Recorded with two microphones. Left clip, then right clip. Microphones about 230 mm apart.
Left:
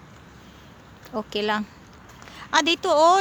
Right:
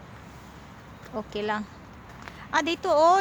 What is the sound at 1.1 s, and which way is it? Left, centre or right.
A woman's voice, left.